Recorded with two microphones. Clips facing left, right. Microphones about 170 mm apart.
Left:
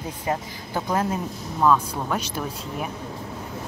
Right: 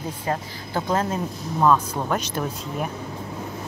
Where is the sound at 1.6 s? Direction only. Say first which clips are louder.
Right 1 dB; 5° right (ahead or behind).